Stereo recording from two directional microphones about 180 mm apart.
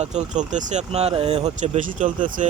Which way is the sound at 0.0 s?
40° right (ahead or behind).